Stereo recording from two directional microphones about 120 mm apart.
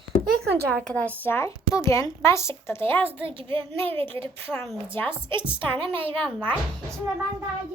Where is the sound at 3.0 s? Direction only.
50° right (ahead or behind).